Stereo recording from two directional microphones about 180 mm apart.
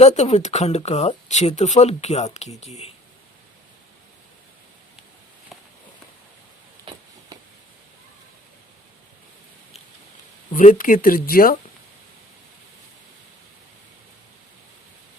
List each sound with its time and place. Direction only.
0.0 s speech: 40° left (ahead or behind)
7.3 s a sound: 20° right (ahead or behind)
10.5 s speech: 45° left (ahead or behind)